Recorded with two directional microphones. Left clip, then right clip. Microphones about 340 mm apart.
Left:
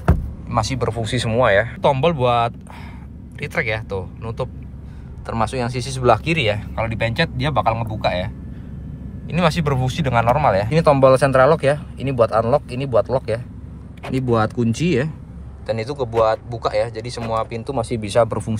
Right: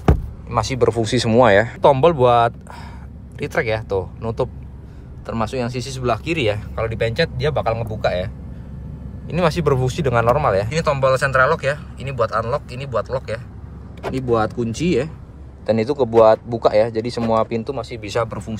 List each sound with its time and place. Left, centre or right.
0.5 s speech: centre
9.3 s speech: centre
10.7 s speech: centre
14.3 s speech: left
15.6 s speech: centre
17.7 s speech: centre
18.3 s speech: centre